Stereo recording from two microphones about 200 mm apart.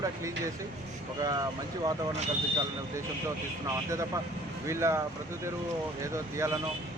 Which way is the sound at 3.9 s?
15° right (ahead or behind).